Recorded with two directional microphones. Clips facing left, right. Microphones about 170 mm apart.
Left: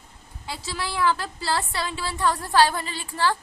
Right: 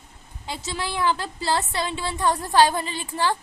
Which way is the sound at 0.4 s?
20° right (ahead or behind).